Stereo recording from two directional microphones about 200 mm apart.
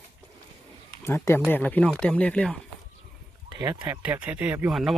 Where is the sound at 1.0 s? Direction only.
15° left (ahead or behind).